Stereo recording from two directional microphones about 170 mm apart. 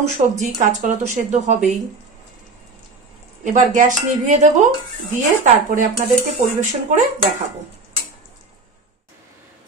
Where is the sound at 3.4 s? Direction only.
50° right (ahead or behind).